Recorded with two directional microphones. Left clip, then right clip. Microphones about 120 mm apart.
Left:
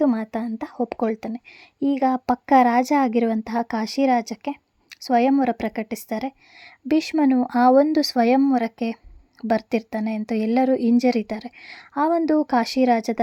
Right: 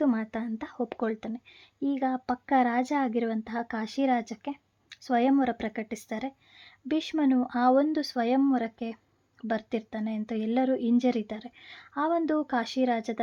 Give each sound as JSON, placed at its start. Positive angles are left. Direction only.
{"t": 0.0, "sound": "a woman's voice", "side_deg": 30}